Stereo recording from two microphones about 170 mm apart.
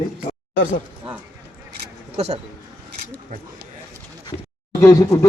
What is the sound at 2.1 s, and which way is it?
Speech, 40° right (ahead or behind).